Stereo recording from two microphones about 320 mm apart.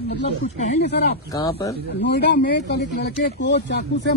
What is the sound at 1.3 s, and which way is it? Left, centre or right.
Speech, centre.